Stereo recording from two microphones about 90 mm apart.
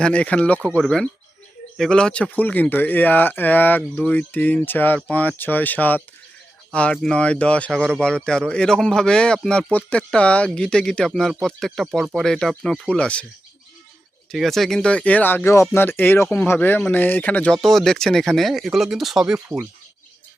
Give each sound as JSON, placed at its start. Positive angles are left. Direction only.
{"t": 0.0, "sound": "speech", "side_deg": 15}
{"t": 0.8, "sound": "speech", "side_deg": 5}
{"t": 2.3, "sound": "speech", "side_deg": 20}
{"t": 14.3, "sound": "speech", "side_deg": 0}
{"t": 17.6, "sound": "speech", "side_deg": 5}